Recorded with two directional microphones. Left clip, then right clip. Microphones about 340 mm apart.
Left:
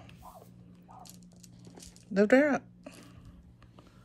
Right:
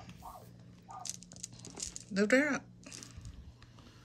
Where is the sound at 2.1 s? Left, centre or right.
Centre.